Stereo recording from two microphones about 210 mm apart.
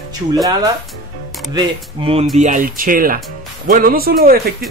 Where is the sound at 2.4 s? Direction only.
35° right (ahead or behind).